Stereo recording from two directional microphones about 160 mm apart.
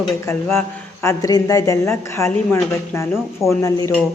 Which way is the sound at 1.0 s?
20° left (ahead or behind).